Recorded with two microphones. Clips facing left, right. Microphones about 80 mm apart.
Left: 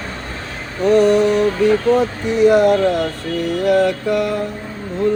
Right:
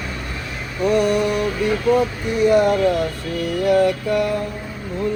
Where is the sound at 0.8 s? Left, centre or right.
Centre.